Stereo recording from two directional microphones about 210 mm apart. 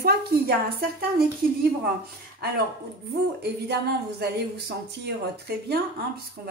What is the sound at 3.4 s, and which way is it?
Speech, 50° right (ahead or behind).